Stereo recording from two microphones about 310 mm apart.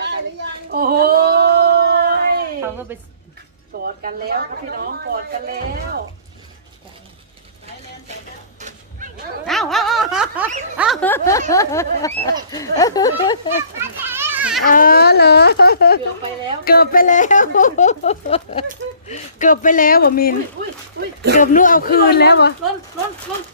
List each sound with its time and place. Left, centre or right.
0.7 s a sound: right
2.9 s a woman's voice: centre
3.8 s speech: right
9.5 s speech: centre
10.8 s a sound: centre
13.8 s children playing: centre
14.7 s speech: left
21.3 s speech: left